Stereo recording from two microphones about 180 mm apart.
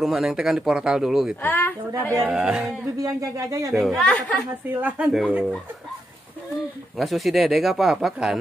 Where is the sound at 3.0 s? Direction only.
20° right (ahead or behind).